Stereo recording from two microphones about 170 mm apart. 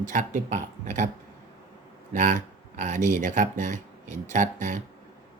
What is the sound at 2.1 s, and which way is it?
Speech, 45° right (ahead or behind).